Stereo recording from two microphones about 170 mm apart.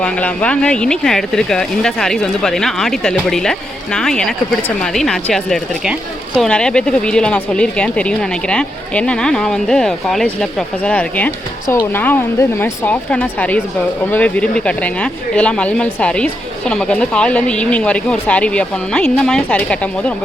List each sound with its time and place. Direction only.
0.0 s speech: 5° left (ahead or behind)